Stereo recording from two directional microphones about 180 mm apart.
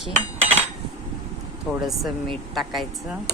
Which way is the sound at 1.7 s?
Centre (ahead or behind).